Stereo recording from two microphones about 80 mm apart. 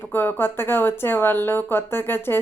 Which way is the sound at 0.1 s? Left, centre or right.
Left.